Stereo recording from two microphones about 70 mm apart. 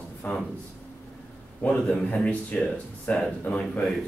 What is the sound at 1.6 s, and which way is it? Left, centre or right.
A man's voice, centre.